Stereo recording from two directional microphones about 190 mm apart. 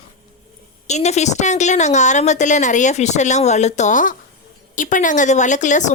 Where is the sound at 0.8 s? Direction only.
35° left (ahead or behind).